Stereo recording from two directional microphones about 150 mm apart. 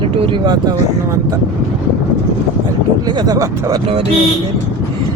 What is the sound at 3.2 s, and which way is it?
Speech, 25° right (ahead or behind).